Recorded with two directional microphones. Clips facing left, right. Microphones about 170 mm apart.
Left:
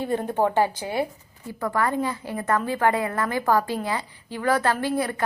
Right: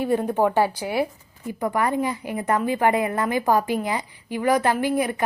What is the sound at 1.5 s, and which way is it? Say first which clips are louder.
A woman's voice: right 2 dB; 20° right (ahead or behind).